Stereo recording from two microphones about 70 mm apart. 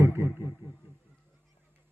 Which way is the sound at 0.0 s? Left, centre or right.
Right.